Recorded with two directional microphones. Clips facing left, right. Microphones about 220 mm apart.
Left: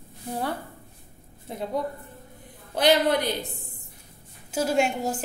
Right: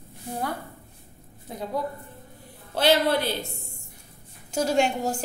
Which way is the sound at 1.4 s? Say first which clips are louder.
Left 1 dB; 25° left (ahead or behind).